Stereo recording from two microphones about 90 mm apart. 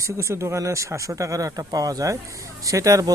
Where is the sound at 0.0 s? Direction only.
35° right (ahead or behind).